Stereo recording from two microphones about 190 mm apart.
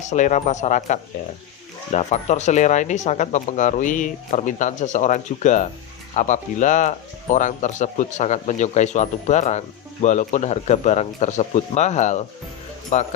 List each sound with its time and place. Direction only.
0.0 s speech: 40° left (ahead or behind)